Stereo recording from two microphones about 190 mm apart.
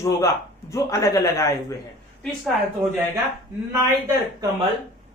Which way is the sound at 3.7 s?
15° right (ahead or behind).